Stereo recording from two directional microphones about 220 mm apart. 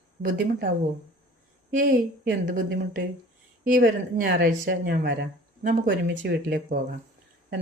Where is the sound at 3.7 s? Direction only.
40° right (ahead or behind).